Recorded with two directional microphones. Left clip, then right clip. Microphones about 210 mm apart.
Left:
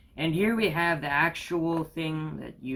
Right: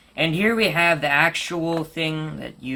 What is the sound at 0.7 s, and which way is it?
Speech, 40° right (ahead or behind).